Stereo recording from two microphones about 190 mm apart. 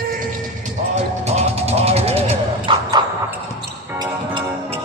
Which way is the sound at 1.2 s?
35° right (ahead or behind).